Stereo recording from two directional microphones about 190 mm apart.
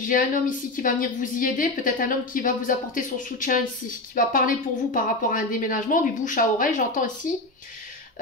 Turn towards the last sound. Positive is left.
turn(degrees=45)  # may be behind; listen again after turning